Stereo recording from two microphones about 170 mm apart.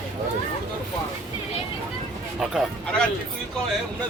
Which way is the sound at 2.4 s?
Centre (ahead or behind).